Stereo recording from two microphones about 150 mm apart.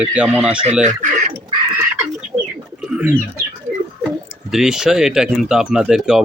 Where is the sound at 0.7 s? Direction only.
50° right (ahead or behind).